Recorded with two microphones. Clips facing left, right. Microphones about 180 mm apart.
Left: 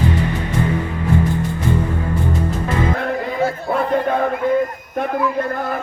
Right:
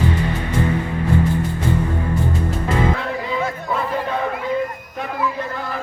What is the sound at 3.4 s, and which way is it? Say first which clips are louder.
Chatter: left 4 dB; 30° left (ahead or behind).